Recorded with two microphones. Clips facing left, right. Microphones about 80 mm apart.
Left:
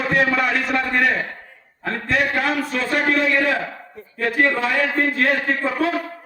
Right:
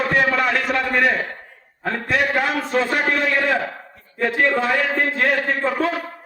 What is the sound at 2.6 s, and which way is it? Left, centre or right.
Speech, right.